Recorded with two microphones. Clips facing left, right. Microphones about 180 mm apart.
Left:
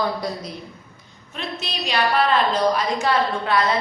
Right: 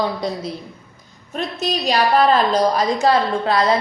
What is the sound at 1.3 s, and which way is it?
A woman's voice, 45° right (ahead or behind).